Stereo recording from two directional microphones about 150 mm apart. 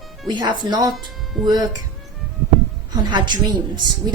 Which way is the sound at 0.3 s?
30° right (ahead or behind).